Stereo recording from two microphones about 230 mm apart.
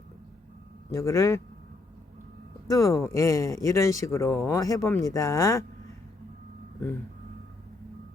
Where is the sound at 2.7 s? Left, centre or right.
Centre.